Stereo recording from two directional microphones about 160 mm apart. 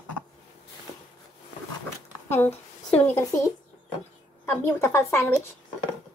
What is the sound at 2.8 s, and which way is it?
Speech, 10° left (ahead or behind).